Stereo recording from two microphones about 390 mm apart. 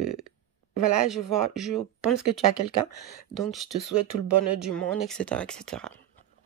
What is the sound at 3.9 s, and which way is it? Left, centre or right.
Speech, right.